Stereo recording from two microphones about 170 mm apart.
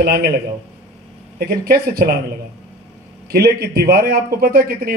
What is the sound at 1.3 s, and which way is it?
Speech, 65° right (ahead or behind).